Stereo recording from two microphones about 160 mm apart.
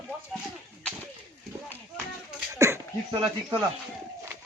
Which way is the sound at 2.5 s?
20° right (ahead or behind).